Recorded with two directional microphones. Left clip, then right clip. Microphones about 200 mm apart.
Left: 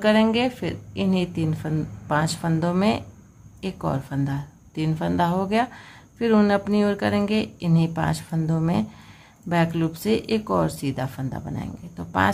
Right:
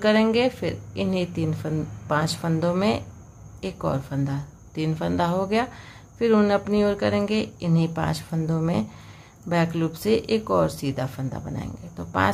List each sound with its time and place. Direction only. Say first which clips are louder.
0.0 s speech: even; 5° left (ahead or behind)